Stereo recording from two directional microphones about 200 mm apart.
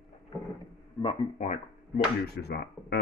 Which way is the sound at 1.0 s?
35° left (ahead or behind).